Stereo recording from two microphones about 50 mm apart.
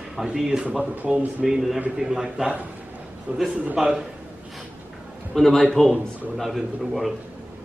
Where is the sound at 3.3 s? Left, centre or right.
Right.